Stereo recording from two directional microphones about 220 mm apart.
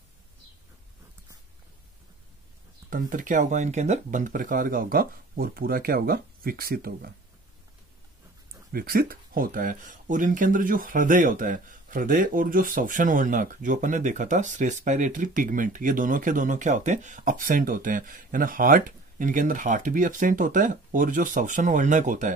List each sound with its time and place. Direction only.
2.9 s speech: 35° right (ahead or behind)
8.7 s speech: 40° right (ahead or behind)